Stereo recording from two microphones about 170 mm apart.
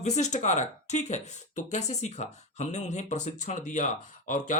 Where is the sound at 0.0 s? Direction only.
40° left (ahead or behind).